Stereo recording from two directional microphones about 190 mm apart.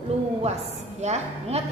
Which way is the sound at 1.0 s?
35° right (ahead or behind).